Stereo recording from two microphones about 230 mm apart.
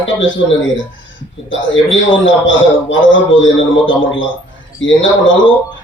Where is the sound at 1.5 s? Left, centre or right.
Left.